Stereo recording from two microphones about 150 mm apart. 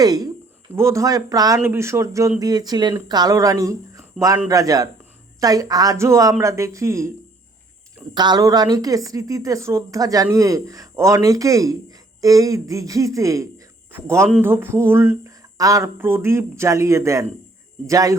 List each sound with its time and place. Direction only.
0.0 s speech: 25° right (ahead or behind)
8.1 s speech: 30° right (ahead or behind)